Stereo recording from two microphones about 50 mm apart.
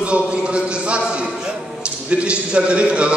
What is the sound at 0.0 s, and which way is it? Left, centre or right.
A man's voice, right.